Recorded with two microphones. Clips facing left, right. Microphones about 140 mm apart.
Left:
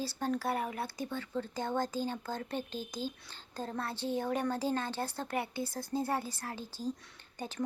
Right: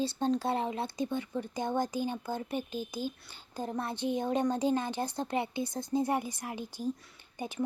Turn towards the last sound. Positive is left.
turn(degrees=-10)  # may be behind; listen again after turning